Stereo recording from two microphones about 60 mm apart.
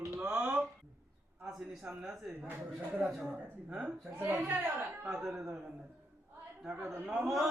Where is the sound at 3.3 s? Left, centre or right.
Centre.